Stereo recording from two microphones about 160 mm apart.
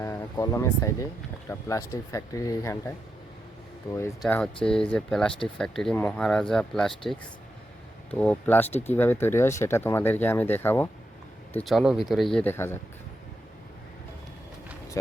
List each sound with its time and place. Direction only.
0.0 s speech: 15° left (ahead or behind)
4.3 s speech: 5° left (ahead or behind)
11.6 s speech: centre (ahead or behind); by 12.8 s 15° left (ahead or behind)